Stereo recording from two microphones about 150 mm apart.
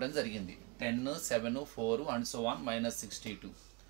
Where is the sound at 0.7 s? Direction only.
15° left (ahead or behind).